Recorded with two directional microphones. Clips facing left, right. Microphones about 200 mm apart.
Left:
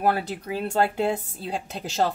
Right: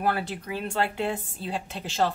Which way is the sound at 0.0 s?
40° left (ahead or behind).